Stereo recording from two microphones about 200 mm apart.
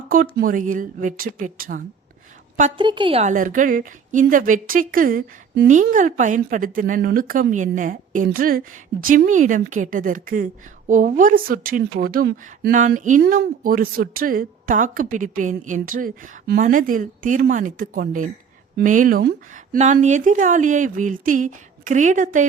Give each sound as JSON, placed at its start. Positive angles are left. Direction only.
{"t": 0.1, "sound": "a woman's voice", "side_deg": -45}
{"t": 2.8, "sound": "a woman's voice", "side_deg": -25}